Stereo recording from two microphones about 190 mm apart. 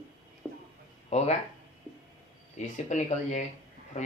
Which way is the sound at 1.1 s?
35° left (ahead or behind).